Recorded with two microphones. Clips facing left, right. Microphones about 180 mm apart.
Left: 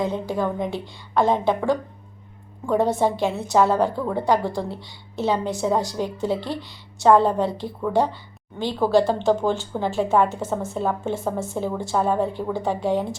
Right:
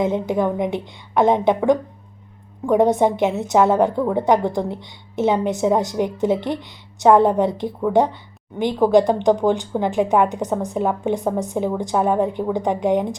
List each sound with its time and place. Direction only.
0.0 s a woman's voice: 20° right (ahead or behind)